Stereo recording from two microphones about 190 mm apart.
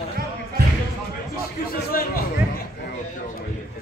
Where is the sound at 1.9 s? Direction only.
50° left (ahead or behind).